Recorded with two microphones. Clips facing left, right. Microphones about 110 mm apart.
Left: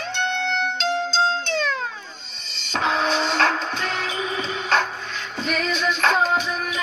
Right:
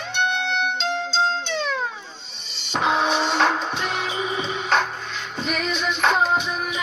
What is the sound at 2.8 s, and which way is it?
Music, 5° right (ahead or behind).